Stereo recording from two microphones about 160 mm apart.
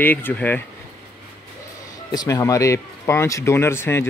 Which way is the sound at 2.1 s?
20° left (ahead or behind).